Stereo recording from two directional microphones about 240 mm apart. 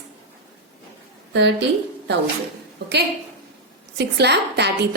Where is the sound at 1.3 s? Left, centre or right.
Right.